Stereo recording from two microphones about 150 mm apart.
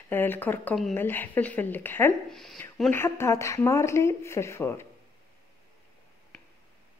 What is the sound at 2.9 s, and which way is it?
Speech, 15° left (ahead or behind).